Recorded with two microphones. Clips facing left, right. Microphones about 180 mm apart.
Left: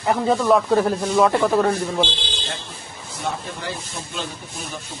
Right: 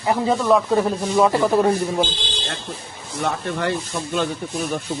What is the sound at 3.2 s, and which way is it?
Speech, 60° right (ahead or behind).